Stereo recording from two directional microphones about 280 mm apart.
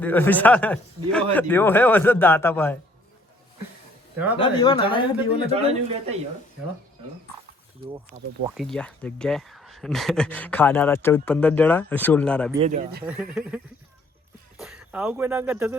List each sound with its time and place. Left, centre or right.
0.0 s speech: centre
4.4 s speech: centre
5.5 s a man's voice: right
8.1 s a man's voice: right
8.4 s speech: centre
12.5 s a man's voice: right
13.1 s speech: centre
14.6 s speech: centre